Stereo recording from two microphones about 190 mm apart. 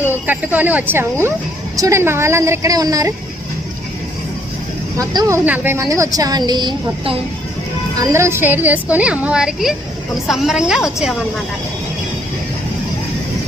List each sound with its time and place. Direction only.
0.0 s a woman's voice: 10° right (ahead or behind)
4.9 s a woman's voice: 15° right (ahead or behind)
8.1 s a woman's voice: 15° right (ahead or behind)